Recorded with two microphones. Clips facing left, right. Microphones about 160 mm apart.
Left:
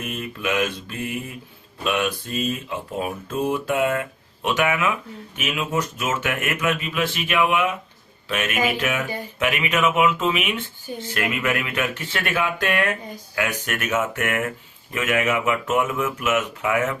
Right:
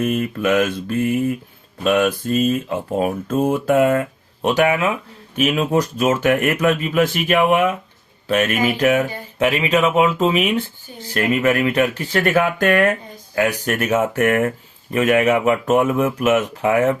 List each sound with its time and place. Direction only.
0.0 s speech: 45° right (ahead or behind)